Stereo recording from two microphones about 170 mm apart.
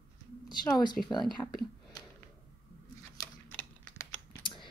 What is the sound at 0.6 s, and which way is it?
Speech, 25° left (ahead or behind).